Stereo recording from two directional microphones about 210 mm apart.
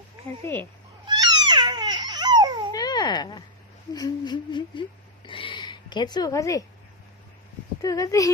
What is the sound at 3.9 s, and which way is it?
Speech, 20° left (ahead or behind).